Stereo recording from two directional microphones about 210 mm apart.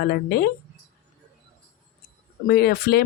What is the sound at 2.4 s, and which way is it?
Speech, 45° left (ahead or behind).